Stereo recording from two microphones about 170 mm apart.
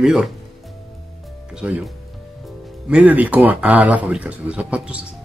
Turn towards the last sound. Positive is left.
turn(degrees=-5)  # may be behind; listen again after turning